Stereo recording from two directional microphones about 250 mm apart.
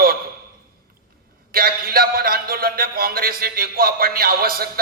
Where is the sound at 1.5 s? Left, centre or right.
Right.